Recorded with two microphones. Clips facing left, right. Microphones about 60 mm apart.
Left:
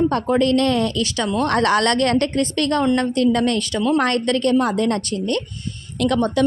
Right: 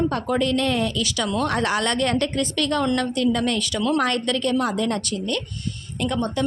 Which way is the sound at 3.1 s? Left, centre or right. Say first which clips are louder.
Left 4 dB; left.